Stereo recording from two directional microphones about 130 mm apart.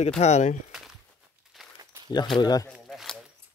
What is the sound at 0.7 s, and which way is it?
Crumpling, 5° right (ahead or behind).